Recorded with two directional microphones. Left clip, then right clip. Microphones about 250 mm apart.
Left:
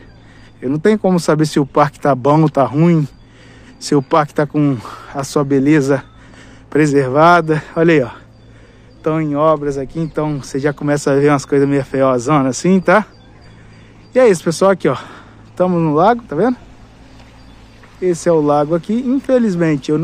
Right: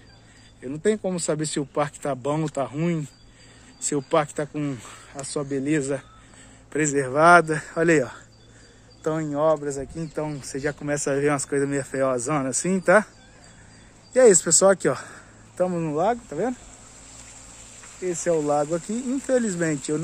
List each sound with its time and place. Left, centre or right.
0.6 s speech: left; by 13.1 s centre
14.1 s speech: centre
18.0 s speech: centre